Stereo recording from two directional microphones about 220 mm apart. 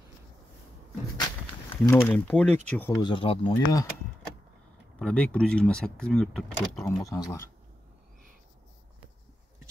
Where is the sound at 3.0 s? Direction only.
25° left (ahead or behind).